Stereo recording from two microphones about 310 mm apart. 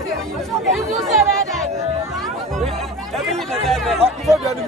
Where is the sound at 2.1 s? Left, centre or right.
Centre.